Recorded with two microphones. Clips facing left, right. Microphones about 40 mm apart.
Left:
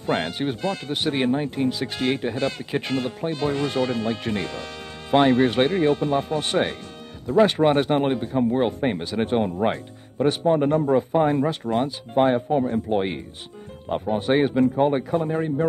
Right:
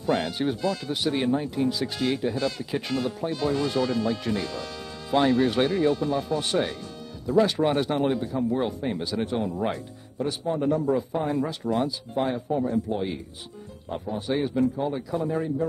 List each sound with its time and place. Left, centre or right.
0.0 s a man's voice: left